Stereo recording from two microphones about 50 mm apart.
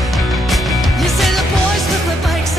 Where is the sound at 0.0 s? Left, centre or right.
Centre.